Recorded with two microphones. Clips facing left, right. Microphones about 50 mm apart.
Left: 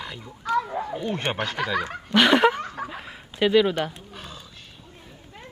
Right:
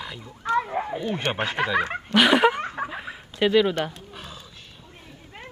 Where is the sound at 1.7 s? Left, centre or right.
Right.